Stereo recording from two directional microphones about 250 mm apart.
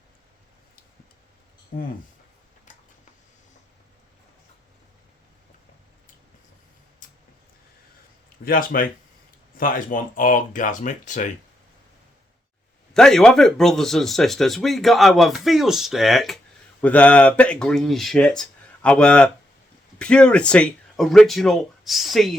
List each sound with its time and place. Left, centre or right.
2.7 s a sound: left
8.4 s speech: left
12.9 s speech: centre